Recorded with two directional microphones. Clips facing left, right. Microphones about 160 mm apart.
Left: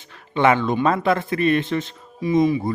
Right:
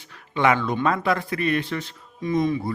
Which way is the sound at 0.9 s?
25° left (ahead or behind).